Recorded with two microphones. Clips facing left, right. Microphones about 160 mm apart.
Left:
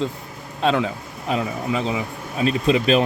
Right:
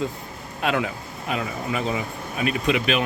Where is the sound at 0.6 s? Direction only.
25° left (ahead or behind).